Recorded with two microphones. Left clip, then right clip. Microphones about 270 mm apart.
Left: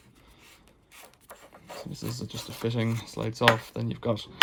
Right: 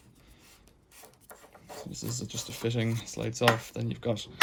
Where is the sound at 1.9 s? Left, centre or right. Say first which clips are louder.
Left 1 dB; left.